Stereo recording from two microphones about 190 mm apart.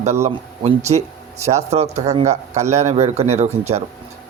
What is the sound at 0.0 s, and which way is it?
A man's voice, 35° right (ahead or behind).